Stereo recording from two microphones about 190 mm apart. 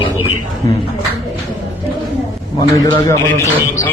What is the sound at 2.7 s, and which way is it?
A man's voice, 15° left (ahead or behind).